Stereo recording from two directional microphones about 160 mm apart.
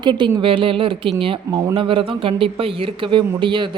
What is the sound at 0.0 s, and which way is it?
Speech, 30° right (ahead or behind).